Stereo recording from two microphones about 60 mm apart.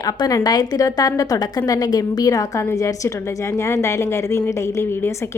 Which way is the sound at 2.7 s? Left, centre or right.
Left.